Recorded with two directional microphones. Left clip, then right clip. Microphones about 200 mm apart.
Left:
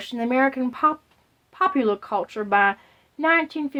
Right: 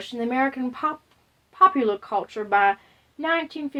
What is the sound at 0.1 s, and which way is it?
Speech, 35° left (ahead or behind).